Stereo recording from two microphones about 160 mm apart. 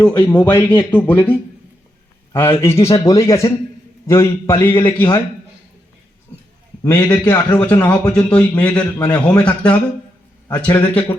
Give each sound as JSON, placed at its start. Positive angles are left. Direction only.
{"t": 0.2, "sound": "a man's voice", "side_deg": 10}
{"t": 6.8, "sound": "a man's voice", "side_deg": 15}